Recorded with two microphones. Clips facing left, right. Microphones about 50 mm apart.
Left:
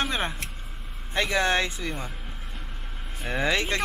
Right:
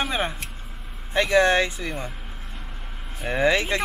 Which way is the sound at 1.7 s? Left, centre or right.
Centre.